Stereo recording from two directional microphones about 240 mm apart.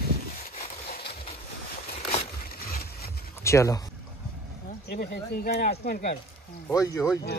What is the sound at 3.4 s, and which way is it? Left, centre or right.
Speech, centre.